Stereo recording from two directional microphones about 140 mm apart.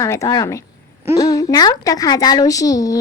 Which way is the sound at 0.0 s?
25° left (ahead or behind).